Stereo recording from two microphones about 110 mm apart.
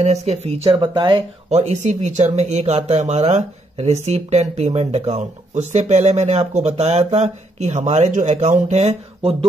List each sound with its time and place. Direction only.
0.0 s speech: 90° right
0.7 s speech: 45° right (ahead or behind)
1.5 s speech: 90° right; by 9.5 s 70° right (ahead or behind)